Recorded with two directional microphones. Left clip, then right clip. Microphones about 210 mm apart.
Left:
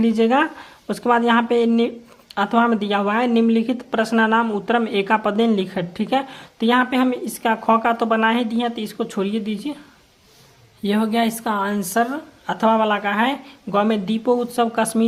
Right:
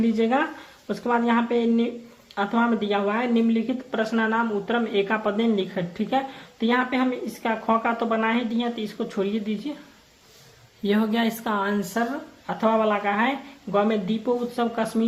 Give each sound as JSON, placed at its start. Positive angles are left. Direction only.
{"t": 0.0, "sound": "speech", "side_deg": 40}
{"t": 10.8, "sound": "speech", "side_deg": 30}